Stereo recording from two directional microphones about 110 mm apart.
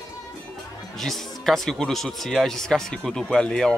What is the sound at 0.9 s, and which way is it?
Speech, centre (ahead or behind).